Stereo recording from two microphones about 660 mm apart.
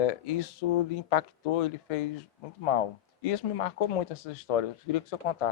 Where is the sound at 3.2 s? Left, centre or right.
Left.